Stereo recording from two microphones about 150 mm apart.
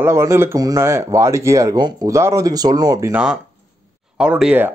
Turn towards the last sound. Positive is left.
turn(degrees=-10)  # may be behind; listen again after turning